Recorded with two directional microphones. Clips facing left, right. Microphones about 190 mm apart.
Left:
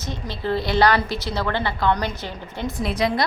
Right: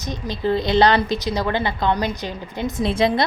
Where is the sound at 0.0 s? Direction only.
15° right (ahead or behind).